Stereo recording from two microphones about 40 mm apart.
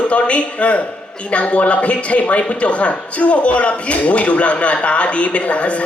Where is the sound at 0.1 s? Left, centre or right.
Left.